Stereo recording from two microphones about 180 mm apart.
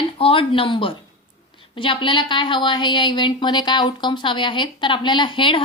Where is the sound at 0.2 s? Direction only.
30° left (ahead or behind).